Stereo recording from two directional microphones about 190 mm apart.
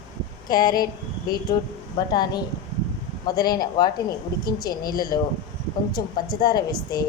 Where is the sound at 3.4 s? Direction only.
20° left (ahead or behind).